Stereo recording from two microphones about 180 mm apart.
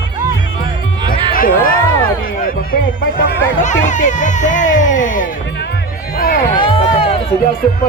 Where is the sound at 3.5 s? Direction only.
45° left (ahead or behind).